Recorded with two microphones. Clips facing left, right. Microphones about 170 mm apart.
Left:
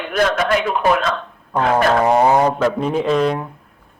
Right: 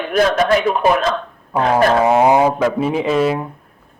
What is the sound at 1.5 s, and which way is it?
A man's voice, 10° right (ahead or behind).